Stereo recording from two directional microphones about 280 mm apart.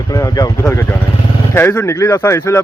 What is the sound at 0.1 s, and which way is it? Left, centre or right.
A man's voice, centre.